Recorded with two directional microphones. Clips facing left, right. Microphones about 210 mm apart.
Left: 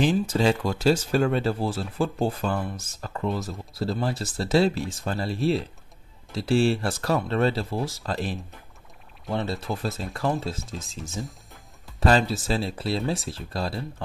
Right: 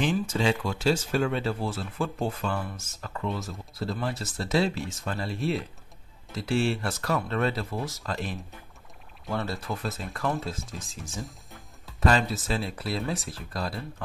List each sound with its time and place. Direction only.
0.0 s speech: 40° left (ahead or behind)
9.7 s speech: 30° left (ahead or behind)